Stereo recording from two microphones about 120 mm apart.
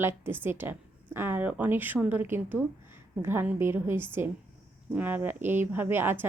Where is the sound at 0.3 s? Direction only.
20° right (ahead or behind).